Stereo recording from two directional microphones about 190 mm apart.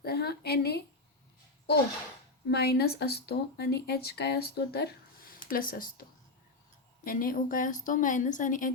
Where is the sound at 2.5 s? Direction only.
55° left (ahead or behind).